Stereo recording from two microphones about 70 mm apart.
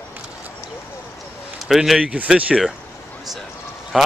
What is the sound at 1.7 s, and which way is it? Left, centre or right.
Speech, centre.